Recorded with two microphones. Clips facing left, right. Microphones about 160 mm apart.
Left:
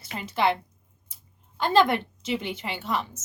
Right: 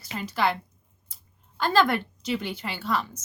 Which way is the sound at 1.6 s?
20° left (ahead or behind).